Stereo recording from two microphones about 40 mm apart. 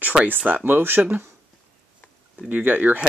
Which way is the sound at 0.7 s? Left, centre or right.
Right.